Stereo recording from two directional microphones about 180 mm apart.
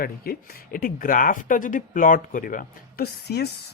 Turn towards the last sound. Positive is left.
turn(degrees=60)  # may be behind; listen again after turning